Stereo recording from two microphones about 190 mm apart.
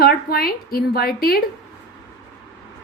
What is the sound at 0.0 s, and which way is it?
A woman's voice, 55° left (ahead or behind).